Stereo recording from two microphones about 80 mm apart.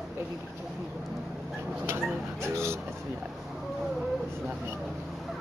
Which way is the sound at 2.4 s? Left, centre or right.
Right.